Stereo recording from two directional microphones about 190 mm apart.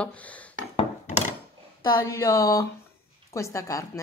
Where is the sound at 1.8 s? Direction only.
20° left (ahead or behind).